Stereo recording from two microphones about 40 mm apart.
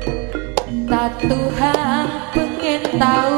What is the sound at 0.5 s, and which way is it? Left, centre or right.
Music, centre.